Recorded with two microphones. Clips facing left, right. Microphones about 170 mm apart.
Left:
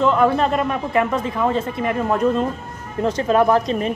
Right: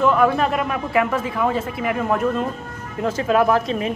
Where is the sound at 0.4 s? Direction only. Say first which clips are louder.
Left 2 dB; 10° right (ahead or behind).